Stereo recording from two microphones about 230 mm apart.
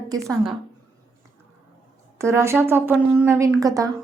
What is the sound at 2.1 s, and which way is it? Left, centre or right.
Speech, centre.